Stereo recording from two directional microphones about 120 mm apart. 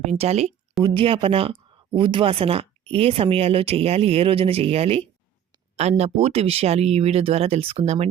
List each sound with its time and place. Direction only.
0.0 s speech: 65° right (ahead or behind)
0.8 s speech: 45° right (ahead or behind)